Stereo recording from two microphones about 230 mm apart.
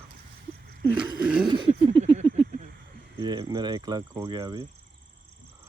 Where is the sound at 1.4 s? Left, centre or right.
Right.